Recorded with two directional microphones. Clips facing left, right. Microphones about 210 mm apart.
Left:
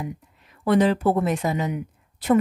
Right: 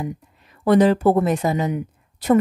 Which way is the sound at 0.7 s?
40° right (ahead or behind).